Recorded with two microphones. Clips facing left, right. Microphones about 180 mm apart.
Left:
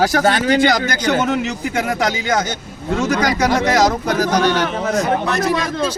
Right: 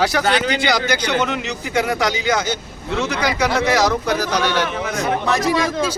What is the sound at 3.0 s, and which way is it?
Speech, 45° left (ahead or behind).